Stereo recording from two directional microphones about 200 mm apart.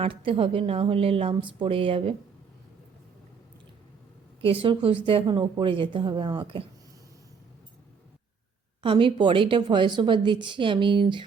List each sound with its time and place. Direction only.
0.0 s a woman's voice: 25° right (ahead or behind)
4.4 s a woman's voice: 25° right (ahead or behind)
8.8 s a woman's voice: 25° right (ahead or behind)